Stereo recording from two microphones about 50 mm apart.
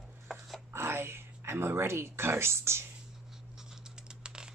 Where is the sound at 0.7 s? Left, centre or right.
Right.